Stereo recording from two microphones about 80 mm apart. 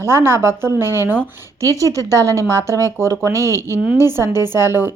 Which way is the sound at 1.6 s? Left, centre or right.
Left.